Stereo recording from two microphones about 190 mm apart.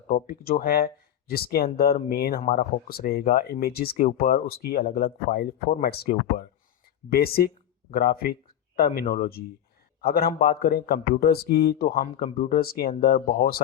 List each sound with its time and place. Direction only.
0.1 s speech: 50° left (ahead or behind)